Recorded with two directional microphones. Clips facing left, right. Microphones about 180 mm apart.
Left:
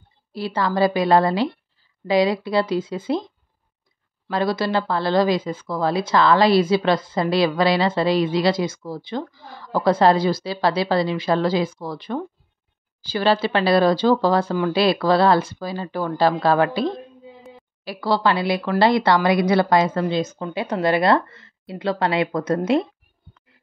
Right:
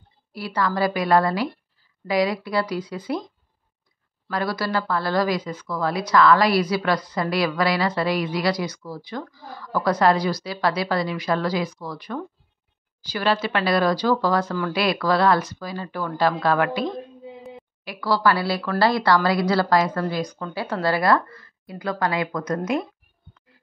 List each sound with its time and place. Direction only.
0.3 s a woman's voice: 25° left (ahead or behind)
4.3 s a woman's voice: 25° left (ahead or behind)